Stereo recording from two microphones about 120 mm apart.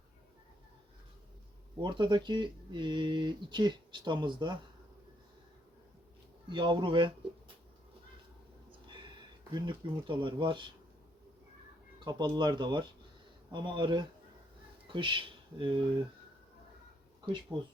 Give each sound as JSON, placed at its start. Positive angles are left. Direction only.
{"t": 1.8, "sound": "speech", "side_deg": -40}
{"t": 6.5, "sound": "speech", "side_deg": -40}
{"t": 8.9, "sound": "speech", "side_deg": -40}
{"t": 11.9, "sound": "speech", "side_deg": -35}
{"t": 17.5, "sound": "speech", "side_deg": -15}